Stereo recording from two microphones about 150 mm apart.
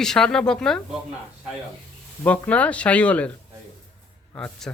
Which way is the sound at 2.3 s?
10° left (ahead or behind).